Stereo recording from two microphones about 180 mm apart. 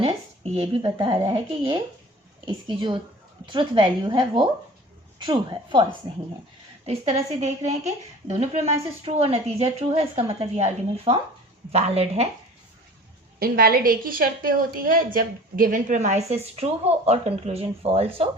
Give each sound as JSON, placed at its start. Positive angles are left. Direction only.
{"t": 0.0, "sound": "speech", "side_deg": -35}
{"t": 6.8, "sound": "a woman's voice", "side_deg": -40}
{"t": 13.4, "sound": "a woman's voice", "side_deg": -55}